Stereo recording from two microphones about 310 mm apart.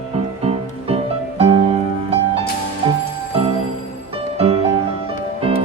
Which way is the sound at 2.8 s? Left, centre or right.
Centre.